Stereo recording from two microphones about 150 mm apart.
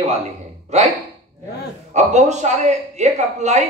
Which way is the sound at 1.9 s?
50° right (ahead or behind).